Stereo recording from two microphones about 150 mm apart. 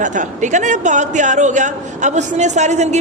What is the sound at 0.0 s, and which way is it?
A man's voice, 55° right (ahead or behind).